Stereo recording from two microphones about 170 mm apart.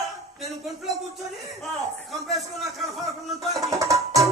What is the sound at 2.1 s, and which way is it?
Speech, centre (ahead or behind).